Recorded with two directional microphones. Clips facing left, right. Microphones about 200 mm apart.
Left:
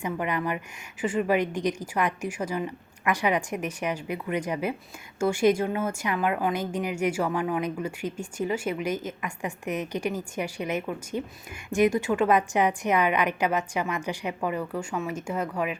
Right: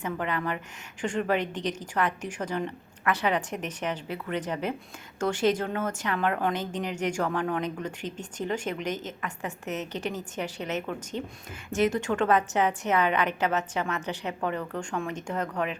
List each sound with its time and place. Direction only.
0.0 s a woman's voice: 10° left (ahead or behind)